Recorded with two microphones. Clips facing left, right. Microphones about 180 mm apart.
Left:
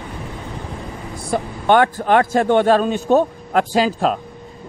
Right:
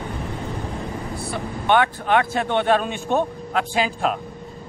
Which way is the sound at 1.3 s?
45° left (ahead or behind).